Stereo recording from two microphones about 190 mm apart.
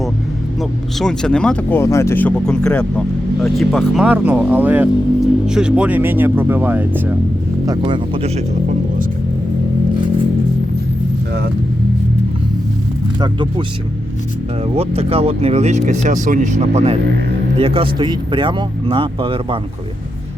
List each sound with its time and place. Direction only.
0.9 s speech: 5° left (ahead or behind)
7.7 s speech: 25° right (ahead or behind)
13.2 s speech: 25° right (ahead or behind)
14.8 s speech: 30° right (ahead or behind)